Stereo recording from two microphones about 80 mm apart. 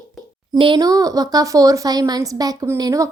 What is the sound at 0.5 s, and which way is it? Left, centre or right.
Speech, right.